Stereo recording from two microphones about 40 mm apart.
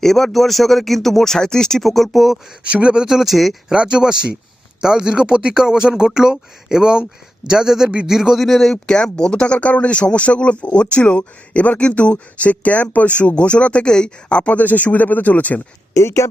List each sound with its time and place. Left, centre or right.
0.0 s speech: centre
1.8 s speech: centre
2.6 s speech: right
3.0 s speech: centre
3.3 s speech: centre
3.7 s speech: right
8.4 s speech: centre
8.7 s speech: left
14.5 s speech: left